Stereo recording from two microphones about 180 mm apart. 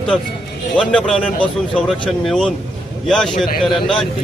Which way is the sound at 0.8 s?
5° left (ahead or behind).